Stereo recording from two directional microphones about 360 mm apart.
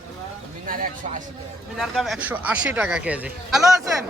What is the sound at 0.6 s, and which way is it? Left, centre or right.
Speech, right.